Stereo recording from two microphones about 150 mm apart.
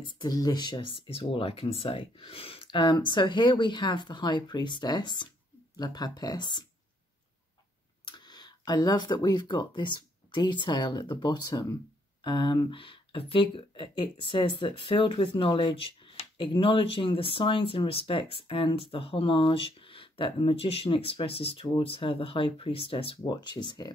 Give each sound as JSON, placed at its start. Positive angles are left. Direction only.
{"t": 0.0, "sound": "speech", "side_deg": 30}
{"t": 8.0, "sound": "speech", "side_deg": 30}